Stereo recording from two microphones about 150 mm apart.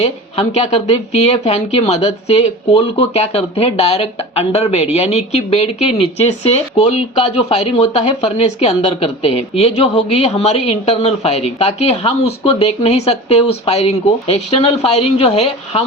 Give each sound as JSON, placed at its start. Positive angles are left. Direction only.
{"t": 0.0, "sound": "speech", "side_deg": 45}